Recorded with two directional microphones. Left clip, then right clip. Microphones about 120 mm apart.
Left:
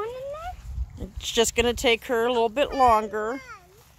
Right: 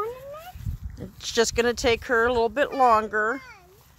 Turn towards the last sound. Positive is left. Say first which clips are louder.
# right 1 dB
turn(degrees=5)  # may be behind; listen again after turning